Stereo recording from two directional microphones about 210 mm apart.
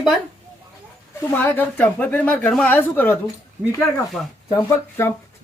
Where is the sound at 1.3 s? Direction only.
10° left (ahead or behind).